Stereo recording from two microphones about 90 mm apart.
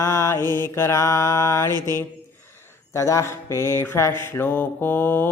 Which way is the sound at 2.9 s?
35° left (ahead or behind).